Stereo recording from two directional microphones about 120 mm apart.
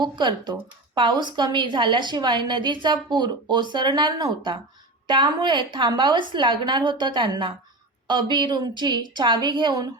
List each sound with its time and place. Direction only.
0.0 s a woman's voice: 40° right (ahead or behind)